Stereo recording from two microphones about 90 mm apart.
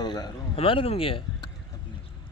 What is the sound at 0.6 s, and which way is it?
Speech, 85° left.